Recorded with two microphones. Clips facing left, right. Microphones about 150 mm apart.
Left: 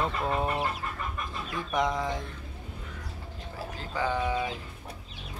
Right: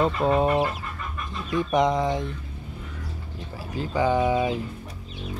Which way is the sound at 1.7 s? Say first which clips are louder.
Right 6 dB; 20° right (ahead or behind).